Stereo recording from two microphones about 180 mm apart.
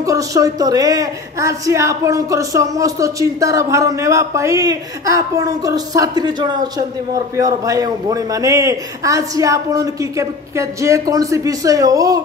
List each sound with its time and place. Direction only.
0.0 s a woman's voice: 20° right (ahead or behind)